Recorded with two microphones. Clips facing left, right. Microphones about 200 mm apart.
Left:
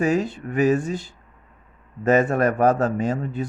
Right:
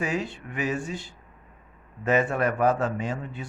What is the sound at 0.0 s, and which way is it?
Speech, 40° left (ahead or behind).